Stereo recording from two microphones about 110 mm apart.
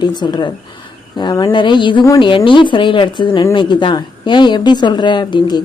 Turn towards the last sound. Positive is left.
turn(degrees=45)  # may be behind; listen again after turning